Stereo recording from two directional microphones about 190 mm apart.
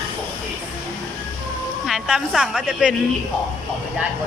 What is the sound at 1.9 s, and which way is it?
Speech, centre (ahead or behind).